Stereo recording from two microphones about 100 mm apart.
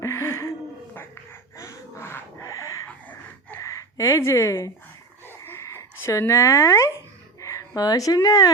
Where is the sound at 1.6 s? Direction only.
30° left (ahead or behind).